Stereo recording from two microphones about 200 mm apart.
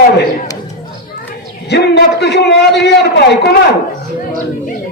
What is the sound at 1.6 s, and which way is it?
A man's voice, 55° left (ahead or behind).